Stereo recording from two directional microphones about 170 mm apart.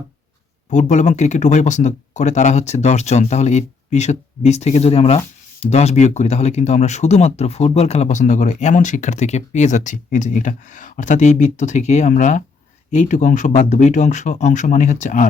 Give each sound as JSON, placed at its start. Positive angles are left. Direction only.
{"t": 0.7, "sound": "speech", "side_deg": 45}